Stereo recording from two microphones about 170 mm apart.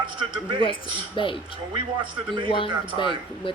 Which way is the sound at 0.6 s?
30° left (ahead or behind).